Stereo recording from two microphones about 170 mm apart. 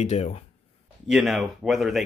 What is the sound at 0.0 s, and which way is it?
Speech, 40° left (ahead or behind).